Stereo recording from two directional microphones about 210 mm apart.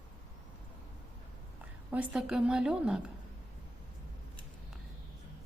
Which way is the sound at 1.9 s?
5° right (ahead or behind).